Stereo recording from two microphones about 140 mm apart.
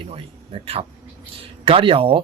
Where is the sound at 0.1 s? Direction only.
45° right (ahead or behind).